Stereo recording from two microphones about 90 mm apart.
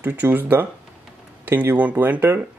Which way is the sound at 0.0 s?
20° right (ahead or behind).